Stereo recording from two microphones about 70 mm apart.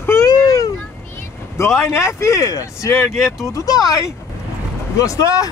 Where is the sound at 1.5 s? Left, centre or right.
Left.